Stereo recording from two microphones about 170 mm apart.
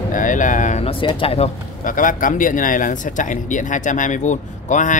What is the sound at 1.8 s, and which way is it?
Speech, 50° left (ahead or behind).